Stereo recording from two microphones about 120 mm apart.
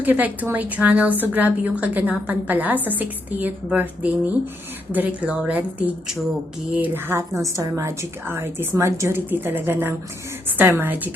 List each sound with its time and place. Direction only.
0.0 s a woman's voice: 15° right (ahead or behind)